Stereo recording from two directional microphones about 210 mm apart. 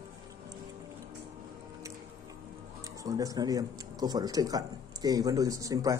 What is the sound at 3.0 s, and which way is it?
Speech, 15° right (ahead or behind).